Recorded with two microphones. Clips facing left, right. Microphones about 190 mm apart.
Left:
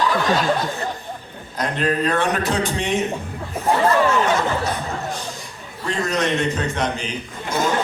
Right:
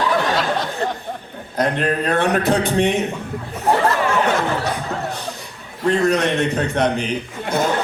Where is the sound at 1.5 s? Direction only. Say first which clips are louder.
Right 2 dB; 55° right (ahead or behind).